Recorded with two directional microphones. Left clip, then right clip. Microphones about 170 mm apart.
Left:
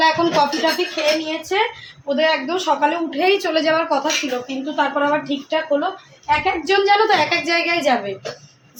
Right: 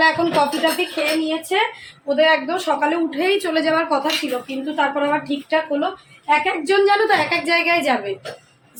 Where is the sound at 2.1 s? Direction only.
10° left (ahead or behind).